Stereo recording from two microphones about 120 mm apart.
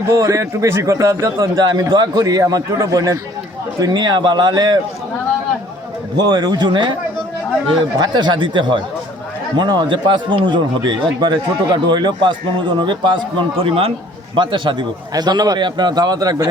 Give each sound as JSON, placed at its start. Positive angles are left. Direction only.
{"t": 0.1, "sound": "a man's voice", "side_deg": -25}
{"t": 6.1, "sound": "a man's voice", "side_deg": -35}
{"t": 7.9, "sound": "a man's voice", "side_deg": -35}
{"t": 14.3, "sound": "a man's voice", "side_deg": -40}